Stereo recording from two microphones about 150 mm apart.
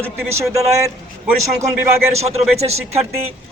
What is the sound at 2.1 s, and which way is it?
Speech, 45° right (ahead or behind).